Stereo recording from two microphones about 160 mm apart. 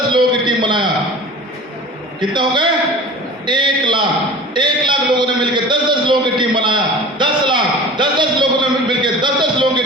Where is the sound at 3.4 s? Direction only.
30° right (ahead or behind).